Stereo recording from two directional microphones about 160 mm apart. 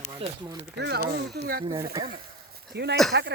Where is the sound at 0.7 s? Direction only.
90° right.